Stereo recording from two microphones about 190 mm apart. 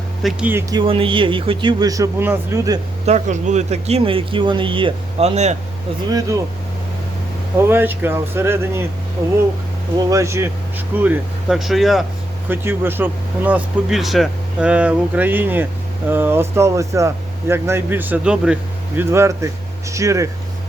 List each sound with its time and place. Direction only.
0.2 s speech: 5° right (ahead or behind)
0.7 s a man's voice: 25° right (ahead or behind)
3.1 s speech: 40° right (ahead or behind)
6.1 s speech: 20° right (ahead or behind)
7.7 s speech: 10° right (ahead or behind)
10.1 s speech: 15° right (ahead or behind)
12.5 s speech: 10° right (ahead or behind)